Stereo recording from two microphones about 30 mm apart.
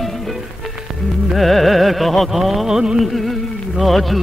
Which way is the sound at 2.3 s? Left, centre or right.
Centre.